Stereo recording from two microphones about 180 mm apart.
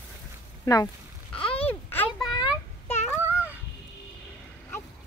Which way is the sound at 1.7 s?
10° left (ahead or behind).